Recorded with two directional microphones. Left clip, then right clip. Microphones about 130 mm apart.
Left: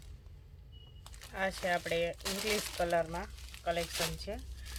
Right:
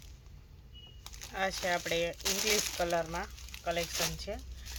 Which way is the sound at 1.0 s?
15° right (ahead or behind).